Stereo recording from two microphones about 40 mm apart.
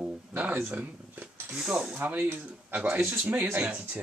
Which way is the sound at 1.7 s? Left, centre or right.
Centre.